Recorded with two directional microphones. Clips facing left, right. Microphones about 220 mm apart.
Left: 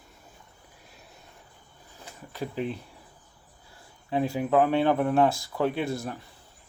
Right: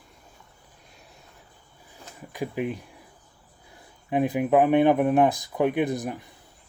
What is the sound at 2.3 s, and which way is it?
Speech, 15° right (ahead or behind).